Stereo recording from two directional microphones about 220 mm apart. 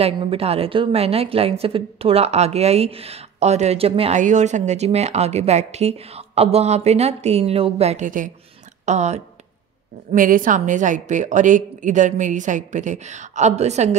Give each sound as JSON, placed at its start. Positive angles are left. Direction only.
{"t": 0.0, "sound": "a woman's voice", "side_deg": -25}